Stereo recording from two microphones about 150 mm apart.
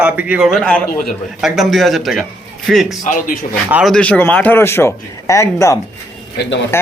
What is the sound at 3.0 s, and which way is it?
Speech, 60° left (ahead or behind).